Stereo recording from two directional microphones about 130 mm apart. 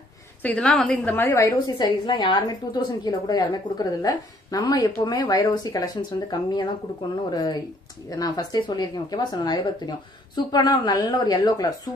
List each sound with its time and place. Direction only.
0.4 s a woman's voice: 10° left (ahead or behind); by 5.8 s 30° left (ahead or behind)
7.2 s speech: 30° left (ahead or behind)